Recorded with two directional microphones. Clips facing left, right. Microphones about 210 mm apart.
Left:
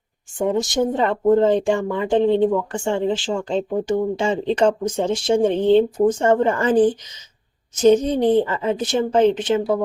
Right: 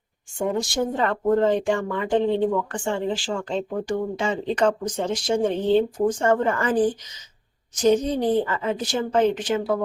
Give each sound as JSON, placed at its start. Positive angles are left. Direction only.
{"t": 0.3, "sound": "speech", "side_deg": 20}